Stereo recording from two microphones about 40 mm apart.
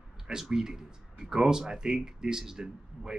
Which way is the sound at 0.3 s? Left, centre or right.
Centre.